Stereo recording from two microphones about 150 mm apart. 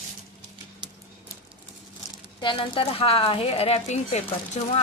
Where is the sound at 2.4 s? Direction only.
35° left (ahead or behind).